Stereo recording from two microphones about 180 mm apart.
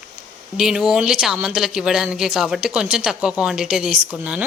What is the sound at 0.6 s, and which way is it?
Speech, 5° right (ahead or behind).